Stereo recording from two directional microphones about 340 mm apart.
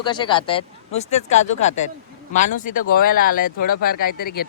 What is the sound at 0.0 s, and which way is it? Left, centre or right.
Speech, centre.